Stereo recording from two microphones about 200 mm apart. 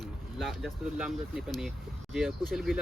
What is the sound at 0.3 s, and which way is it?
Speech, centre (ahead or behind).